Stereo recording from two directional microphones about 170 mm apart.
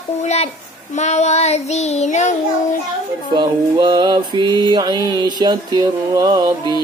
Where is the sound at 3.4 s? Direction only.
25° right (ahead or behind).